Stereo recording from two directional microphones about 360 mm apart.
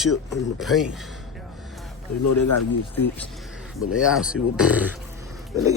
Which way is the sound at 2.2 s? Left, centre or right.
Left.